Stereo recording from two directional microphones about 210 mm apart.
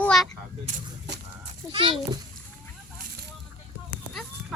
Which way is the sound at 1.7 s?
25° right (ahead or behind).